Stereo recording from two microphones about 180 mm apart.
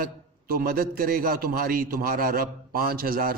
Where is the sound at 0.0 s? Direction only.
55° right (ahead or behind).